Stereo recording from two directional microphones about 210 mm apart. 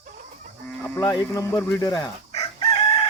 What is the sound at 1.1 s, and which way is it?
Speech, 15° left (ahead or behind).